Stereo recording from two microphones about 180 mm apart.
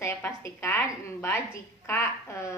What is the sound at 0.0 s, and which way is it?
A woman's voice, 15° left (ahead or behind).